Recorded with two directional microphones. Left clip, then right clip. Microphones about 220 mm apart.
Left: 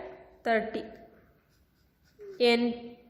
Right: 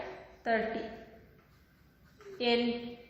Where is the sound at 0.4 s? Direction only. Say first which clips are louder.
Left 4 dB; 50° left (ahead or behind).